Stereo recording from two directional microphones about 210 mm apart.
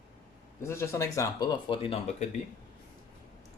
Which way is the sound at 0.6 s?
10° left (ahead or behind).